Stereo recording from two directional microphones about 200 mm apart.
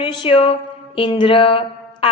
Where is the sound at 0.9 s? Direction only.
25° left (ahead or behind).